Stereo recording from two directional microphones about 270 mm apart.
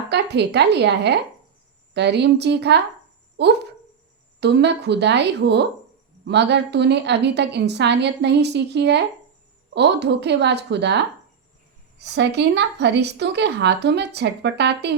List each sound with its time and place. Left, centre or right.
0.1 s a woman's voice: right